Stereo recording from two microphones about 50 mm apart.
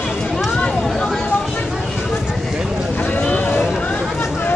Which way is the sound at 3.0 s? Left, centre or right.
Left.